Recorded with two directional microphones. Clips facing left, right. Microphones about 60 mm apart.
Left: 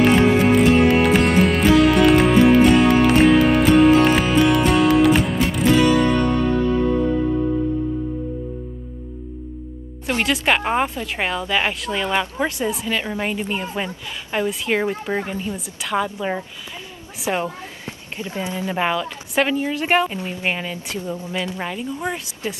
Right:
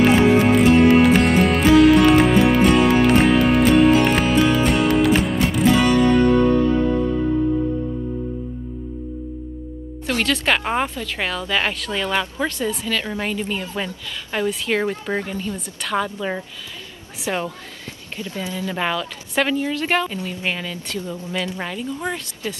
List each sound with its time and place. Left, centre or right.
0.0 s music: centre
10.0 s speech: centre